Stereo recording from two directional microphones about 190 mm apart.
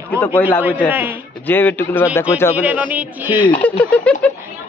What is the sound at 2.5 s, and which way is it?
Speech, 5° right (ahead or behind).